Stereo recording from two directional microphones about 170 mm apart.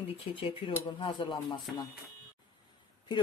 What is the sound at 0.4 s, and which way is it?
Speech, 30° left (ahead or behind).